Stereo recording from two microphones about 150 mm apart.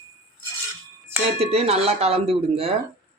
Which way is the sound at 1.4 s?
40° right (ahead or behind).